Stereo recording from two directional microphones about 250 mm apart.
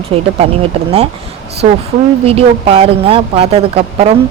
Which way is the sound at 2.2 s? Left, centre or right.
Right.